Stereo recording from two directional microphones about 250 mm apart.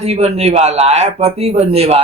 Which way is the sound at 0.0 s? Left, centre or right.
Right.